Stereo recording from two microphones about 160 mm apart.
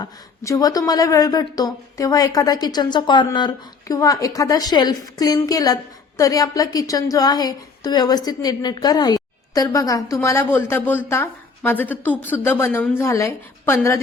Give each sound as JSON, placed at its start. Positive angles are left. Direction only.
{"t": 0.0, "sound": "a woman's voice", "side_deg": 20}